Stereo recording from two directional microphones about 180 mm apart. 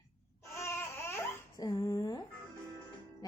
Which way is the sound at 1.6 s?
20° left (ahead or behind).